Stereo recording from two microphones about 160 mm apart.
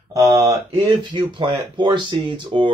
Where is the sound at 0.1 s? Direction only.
20° right (ahead or behind).